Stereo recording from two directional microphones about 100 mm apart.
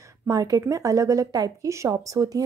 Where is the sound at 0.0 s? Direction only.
30° right (ahead or behind).